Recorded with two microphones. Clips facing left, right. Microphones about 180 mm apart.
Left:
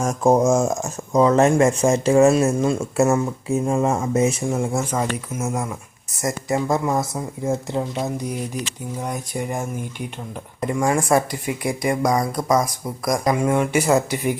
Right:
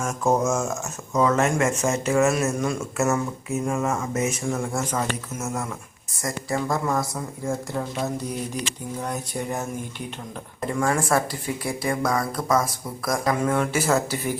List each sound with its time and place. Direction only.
0.0 s speech: 35° left (ahead or behind)
4.8 s speech: 10° left (ahead or behind)
10.8 s speech: 15° left (ahead or behind)